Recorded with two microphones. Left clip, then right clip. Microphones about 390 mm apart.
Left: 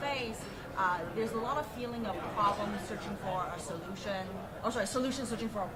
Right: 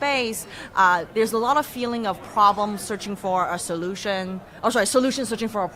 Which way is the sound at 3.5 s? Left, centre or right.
Right.